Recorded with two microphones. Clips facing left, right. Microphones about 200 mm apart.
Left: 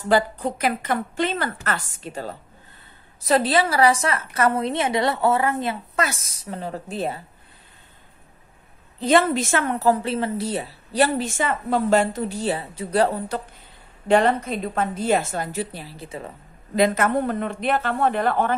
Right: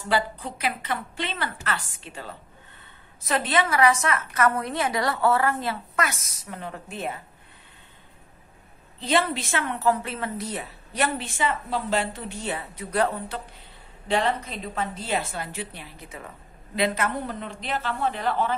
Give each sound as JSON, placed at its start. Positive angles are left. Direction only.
{"t": 0.1, "sound": "a woman's voice", "side_deg": 45}
{"t": 9.0, "sound": "a woman's voice", "side_deg": 45}
{"t": 14.0, "sound": "a woman's voice", "side_deg": 50}
{"t": 16.7, "sound": "a woman's voice", "side_deg": 45}